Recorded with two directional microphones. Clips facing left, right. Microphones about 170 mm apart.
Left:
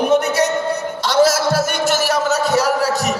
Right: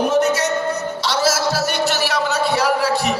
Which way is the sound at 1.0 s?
50° left (ahead or behind).